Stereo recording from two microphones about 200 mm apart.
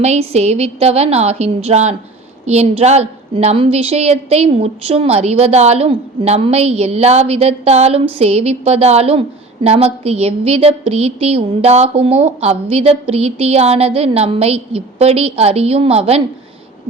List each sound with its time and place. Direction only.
0.0 s a woman's voice: 30° right (ahead or behind)